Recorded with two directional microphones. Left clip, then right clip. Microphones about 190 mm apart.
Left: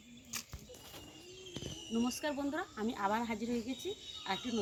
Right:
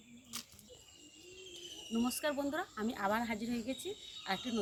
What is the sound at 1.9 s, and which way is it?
Speech, 5° right (ahead or behind).